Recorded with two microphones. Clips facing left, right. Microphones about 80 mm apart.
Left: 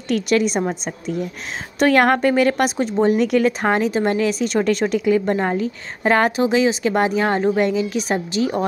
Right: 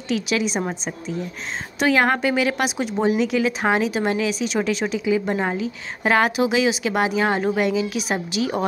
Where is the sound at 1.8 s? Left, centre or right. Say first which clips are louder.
Left 4 dB; left.